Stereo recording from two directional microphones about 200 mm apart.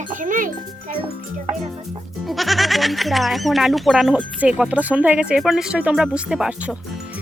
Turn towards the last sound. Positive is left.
turn(degrees=-5)  # may be behind; listen again after turning